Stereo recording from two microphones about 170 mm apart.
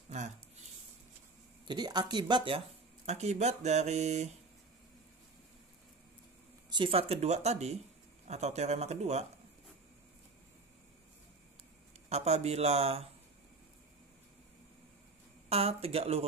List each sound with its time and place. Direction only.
0.1 s a sound: 40° right (ahead or behind)
1.7 s speech: 25° right (ahead or behind)
3.1 s speech: 40° right (ahead or behind)
6.7 s speech: 30° right (ahead or behind)
12.1 s speech: 40° right (ahead or behind)
15.5 s speech: 35° right (ahead or behind)